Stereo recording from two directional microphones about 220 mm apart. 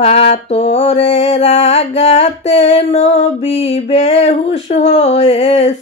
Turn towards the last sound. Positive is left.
turn(degrees=30)  # may be behind; listen again after turning